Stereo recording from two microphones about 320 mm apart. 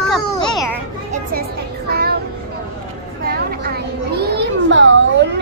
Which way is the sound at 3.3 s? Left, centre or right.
Right.